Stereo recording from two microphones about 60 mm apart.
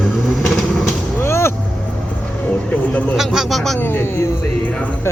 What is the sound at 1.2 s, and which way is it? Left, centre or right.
Vehicle, left.